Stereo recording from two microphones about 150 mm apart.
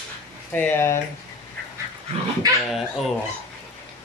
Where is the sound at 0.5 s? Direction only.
15° left (ahead or behind).